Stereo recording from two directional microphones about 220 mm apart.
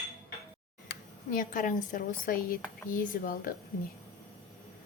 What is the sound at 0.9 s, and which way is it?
Speech, 40° left (ahead or behind).